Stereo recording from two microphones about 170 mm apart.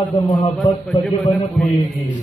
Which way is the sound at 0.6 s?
10° left (ahead or behind).